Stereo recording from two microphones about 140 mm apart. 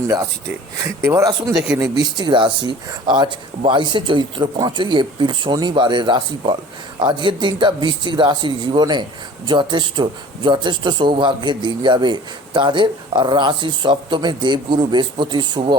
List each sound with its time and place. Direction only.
1.0 s speech: 25° right (ahead or behind)
1.5 s speech: 5° right (ahead or behind)
1.8 s speech: 30° right (ahead or behind)